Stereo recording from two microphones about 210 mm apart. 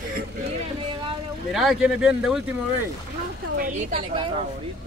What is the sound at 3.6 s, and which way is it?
Speech, 35° right (ahead or behind).